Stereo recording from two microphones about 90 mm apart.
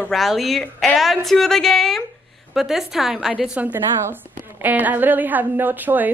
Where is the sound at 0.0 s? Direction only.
Centre (ahead or behind).